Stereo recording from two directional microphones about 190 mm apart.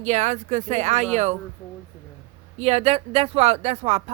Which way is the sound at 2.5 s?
35° right (ahead or behind).